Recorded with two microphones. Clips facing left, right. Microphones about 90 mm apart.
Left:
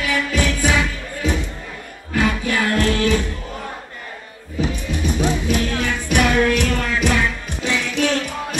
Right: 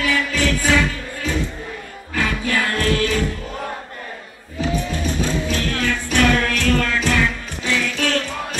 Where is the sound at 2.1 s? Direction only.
20° left (ahead or behind).